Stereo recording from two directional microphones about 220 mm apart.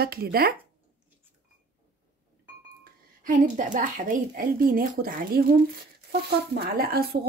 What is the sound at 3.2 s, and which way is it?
Speech, 35° right (ahead or behind).